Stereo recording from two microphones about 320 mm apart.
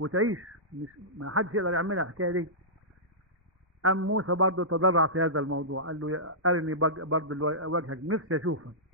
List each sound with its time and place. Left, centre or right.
0.0 s a man's voice: right
3.8 s a man's voice: right